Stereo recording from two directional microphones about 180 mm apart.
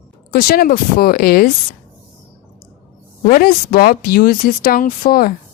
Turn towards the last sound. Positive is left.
turn(degrees=55)  # may be behind; listen again after turning